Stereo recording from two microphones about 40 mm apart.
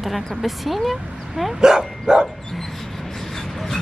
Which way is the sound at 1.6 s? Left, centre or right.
Centre.